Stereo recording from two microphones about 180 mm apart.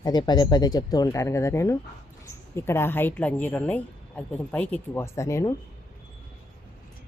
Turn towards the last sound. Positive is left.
turn(degrees=15)  # may be behind; listen again after turning